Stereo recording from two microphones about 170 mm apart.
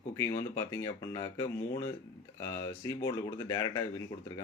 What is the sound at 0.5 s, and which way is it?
Speech, 15° left (ahead or behind).